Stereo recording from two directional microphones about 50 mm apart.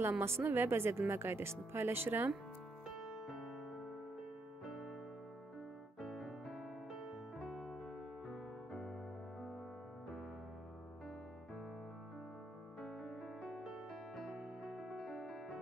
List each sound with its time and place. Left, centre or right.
0.2 s speech: right
3.0 s music: centre
5.9 s music: centre
13.4 s music: centre
15.0 s music: centre